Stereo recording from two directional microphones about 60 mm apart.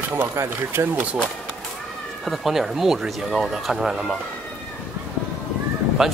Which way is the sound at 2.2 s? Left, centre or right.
Centre.